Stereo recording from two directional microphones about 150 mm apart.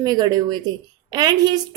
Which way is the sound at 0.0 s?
25° right (ahead or behind).